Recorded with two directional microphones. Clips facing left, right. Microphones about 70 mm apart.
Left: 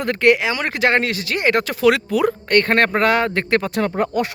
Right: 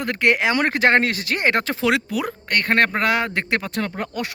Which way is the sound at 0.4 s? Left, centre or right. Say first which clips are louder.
Right 1 dB; right.